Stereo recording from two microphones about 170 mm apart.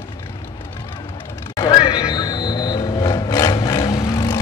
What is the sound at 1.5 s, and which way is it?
Vehicle, 25° left (ahead or behind).